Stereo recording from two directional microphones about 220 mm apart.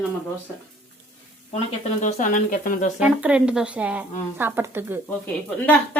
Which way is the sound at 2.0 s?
35° left (ahead or behind).